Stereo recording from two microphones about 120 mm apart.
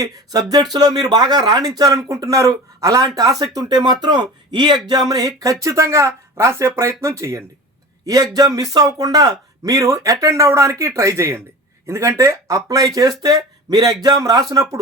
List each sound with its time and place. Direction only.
0.0 s speech: 30° right (ahead or behind)